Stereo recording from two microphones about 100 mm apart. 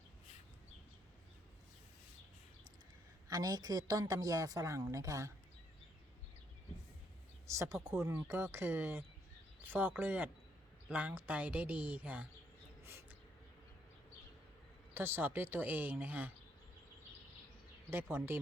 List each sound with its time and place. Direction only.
3.2 s a woman's voice: 40° right (ahead or behind)
7.4 s speech: 30° right (ahead or behind)
12.8 s a sound: 25° right (ahead or behind)
14.9 s speech: 25° right (ahead or behind)
17.9 s speech: 25° right (ahead or behind)